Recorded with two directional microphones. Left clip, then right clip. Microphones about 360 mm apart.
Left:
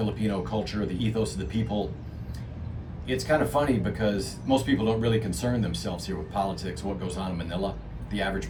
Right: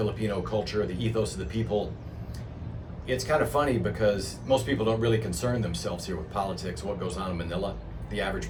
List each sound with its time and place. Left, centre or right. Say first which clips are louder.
0.0 s speech: right 1 dB; centre
3.1 s speech: left 1 dB; centre